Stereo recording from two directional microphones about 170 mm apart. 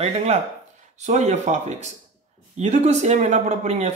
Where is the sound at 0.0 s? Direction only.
40° right (ahead or behind).